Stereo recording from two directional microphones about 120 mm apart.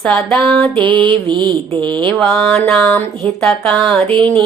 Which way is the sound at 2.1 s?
Centre (ahead or behind).